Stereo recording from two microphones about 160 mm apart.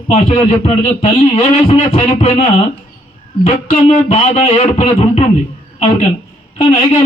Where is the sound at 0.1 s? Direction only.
45° left (ahead or behind).